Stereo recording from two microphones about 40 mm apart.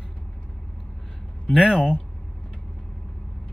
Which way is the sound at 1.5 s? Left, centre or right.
Right.